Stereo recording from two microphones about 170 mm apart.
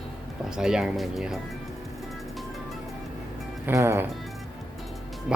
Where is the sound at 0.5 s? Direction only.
5° right (ahead or behind).